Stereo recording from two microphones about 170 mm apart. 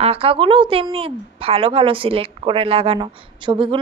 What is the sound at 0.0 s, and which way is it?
A woman's voice, 35° right (ahead or behind).